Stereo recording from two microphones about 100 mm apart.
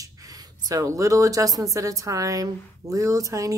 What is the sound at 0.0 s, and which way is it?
Speech, 35° right (ahead or behind).